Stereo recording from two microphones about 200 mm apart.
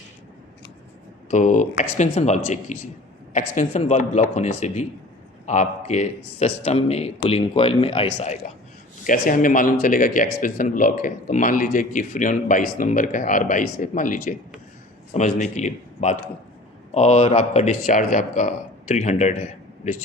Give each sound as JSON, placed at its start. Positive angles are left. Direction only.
{"t": 1.3, "sound": "speech", "side_deg": 40}